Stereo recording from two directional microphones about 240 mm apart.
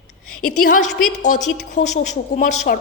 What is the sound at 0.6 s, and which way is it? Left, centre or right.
A woman's voice, left.